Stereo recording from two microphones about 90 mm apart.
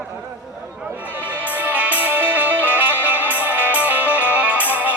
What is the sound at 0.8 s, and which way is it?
Music, 20° right (ahead or behind).